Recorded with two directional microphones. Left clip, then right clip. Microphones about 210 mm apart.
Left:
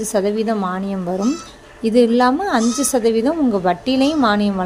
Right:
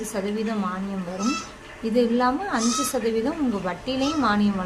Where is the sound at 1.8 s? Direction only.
30° left (ahead or behind).